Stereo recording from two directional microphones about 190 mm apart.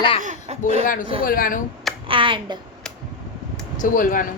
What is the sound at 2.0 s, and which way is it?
Speech, 25° right (ahead or behind).